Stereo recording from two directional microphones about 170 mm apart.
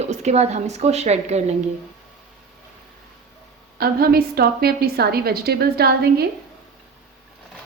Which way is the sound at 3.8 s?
65° right (ahead or behind).